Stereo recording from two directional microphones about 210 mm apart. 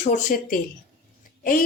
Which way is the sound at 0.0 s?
40° left (ahead or behind).